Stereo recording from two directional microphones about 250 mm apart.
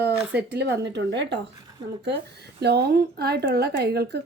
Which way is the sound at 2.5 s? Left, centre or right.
Right.